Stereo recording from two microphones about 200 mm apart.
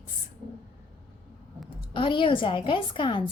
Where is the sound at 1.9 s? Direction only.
25° left (ahead or behind).